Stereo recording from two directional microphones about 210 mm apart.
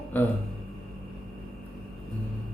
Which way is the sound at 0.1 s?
10° left (ahead or behind).